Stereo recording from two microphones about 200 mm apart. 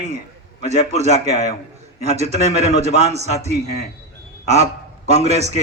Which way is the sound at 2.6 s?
30° left (ahead or behind).